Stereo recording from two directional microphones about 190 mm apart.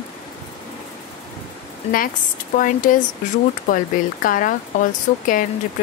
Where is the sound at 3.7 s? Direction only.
45° left (ahead or behind).